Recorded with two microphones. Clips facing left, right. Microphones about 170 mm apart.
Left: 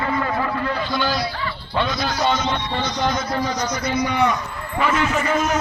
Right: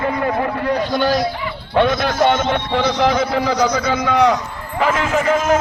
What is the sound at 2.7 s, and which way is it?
A man's voice, 70° right (ahead or behind).